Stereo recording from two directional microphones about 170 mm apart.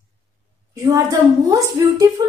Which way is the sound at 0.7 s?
20° right (ahead or behind).